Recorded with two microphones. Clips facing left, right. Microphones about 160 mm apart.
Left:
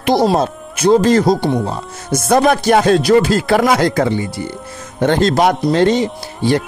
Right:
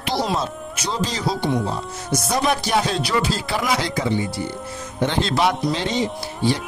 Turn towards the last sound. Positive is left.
turn(degrees=55)  # may be behind; listen again after turning